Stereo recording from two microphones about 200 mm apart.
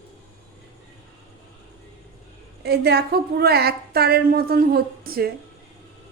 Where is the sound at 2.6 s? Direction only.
55° right (ahead or behind).